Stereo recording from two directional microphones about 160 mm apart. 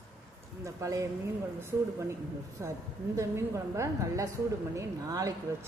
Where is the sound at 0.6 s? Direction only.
20° right (ahead or behind).